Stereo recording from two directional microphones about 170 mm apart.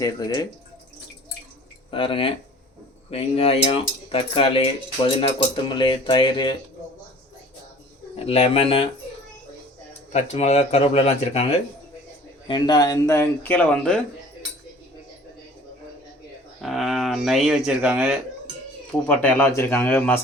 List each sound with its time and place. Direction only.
0.0 s speech: 25° left (ahead or behind)
1.9 s cutlery: 30° left (ahead or behind)
5.6 s speech: 30° left (ahead or behind)
8.1 s cutlery: 35° left (ahead or behind)
10.1 s cutlery: 40° left (ahead or behind)
12.5 s speech: 25° left (ahead or behind); by 14.0 s 5° left (ahead or behind)
16.6 s speech: centre (ahead or behind)
19.0 s speech: 10° left (ahead or behind)